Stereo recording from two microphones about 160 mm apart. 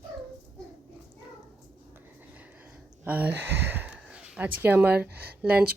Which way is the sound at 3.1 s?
10° right (ahead or behind).